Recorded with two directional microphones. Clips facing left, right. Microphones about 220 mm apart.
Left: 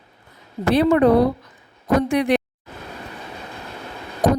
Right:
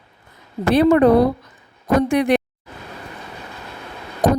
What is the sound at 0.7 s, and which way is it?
Speech, 50° right (ahead or behind).